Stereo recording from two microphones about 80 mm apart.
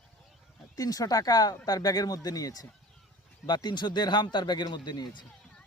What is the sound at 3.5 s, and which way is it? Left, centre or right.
Speech, left.